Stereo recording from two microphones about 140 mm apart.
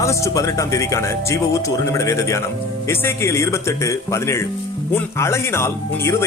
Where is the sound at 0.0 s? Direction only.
20° left (ahead or behind).